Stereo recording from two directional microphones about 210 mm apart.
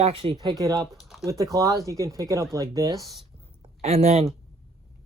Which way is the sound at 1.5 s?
15° right (ahead or behind).